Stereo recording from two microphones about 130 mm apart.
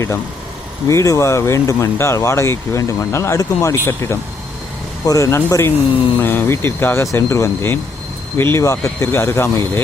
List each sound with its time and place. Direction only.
0.9 s speech: 25° left (ahead or behind)